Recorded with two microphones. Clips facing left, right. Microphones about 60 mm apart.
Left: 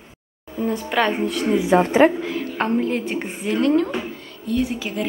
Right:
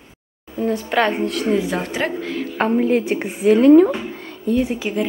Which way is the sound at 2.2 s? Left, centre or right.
Centre.